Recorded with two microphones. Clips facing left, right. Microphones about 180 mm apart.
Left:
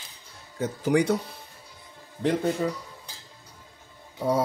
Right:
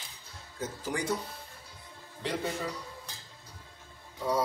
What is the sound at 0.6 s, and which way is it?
Speech, 65° left (ahead or behind).